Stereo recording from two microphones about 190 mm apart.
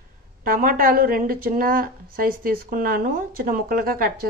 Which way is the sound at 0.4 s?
50° right (ahead or behind).